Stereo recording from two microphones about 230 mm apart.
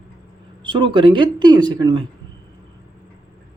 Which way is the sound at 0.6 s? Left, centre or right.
Right.